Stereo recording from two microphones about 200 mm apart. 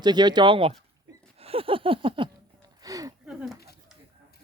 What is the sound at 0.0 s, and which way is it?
Speech, 20° right (ahead or behind).